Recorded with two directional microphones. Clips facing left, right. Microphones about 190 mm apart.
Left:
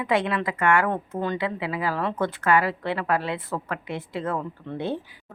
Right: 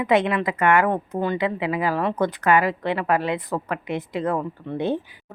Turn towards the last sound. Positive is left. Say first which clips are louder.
# right 4 dB
turn(degrees=-20)  # may be behind; listen again after turning